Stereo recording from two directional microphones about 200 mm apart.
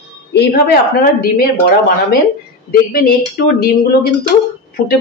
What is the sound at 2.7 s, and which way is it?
Speech, 50° left (ahead or behind).